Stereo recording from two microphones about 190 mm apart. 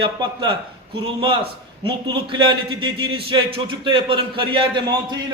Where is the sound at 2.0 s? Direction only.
25° right (ahead or behind).